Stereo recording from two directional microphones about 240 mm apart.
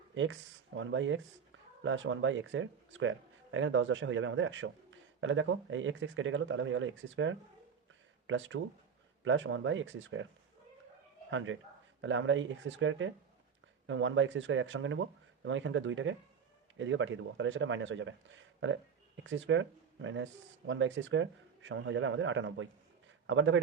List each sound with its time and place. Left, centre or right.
0.1 s speech: right
11.3 s a man's voice: right